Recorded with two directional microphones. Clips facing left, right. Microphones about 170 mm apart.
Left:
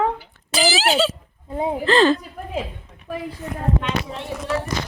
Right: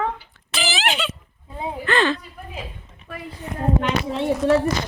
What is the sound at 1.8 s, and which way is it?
Speech, 35° left (ahead or behind).